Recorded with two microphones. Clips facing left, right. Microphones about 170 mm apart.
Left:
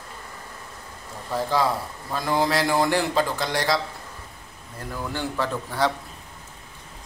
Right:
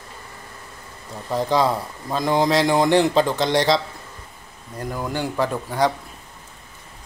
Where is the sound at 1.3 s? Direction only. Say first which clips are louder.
Right 4 dB; 20° right (ahead or behind).